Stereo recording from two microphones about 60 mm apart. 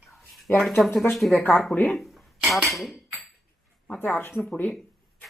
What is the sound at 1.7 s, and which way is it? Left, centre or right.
Speech, left.